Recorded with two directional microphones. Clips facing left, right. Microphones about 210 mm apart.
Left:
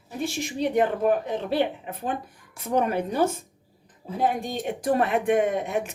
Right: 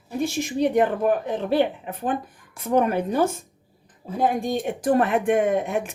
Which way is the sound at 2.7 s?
50° right (ahead or behind).